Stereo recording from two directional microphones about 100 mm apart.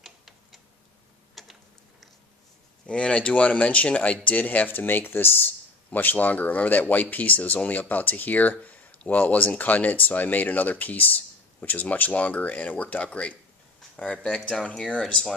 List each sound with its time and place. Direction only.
0.0 s tick-tock: centre (ahead or behind)
1.4 s mechanisms: centre (ahead or behind)
2.9 s speech: 10° left (ahead or behind)